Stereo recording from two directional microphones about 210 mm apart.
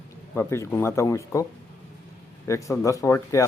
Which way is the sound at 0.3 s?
10° left (ahead or behind).